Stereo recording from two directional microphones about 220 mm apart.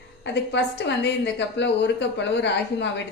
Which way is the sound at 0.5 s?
50° left (ahead or behind).